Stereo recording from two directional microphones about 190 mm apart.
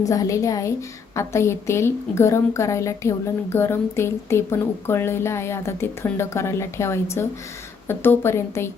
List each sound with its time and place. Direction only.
0.0 s a woman's voice: 15° left (ahead or behind)